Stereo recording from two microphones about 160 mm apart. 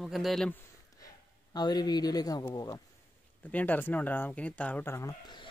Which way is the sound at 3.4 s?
10° left (ahead or behind).